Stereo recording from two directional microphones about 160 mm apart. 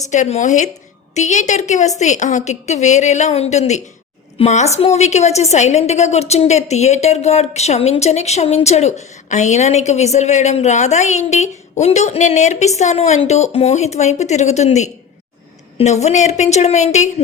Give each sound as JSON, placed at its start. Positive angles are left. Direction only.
{"t": 0.1, "sound": "a woman's voice", "side_deg": 50}